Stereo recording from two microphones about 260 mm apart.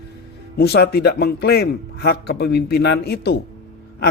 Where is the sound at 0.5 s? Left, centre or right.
Left.